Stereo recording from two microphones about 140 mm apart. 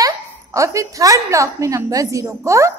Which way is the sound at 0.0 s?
25° right (ahead or behind).